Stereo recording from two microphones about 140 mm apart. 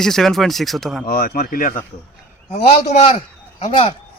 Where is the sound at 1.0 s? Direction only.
90° left.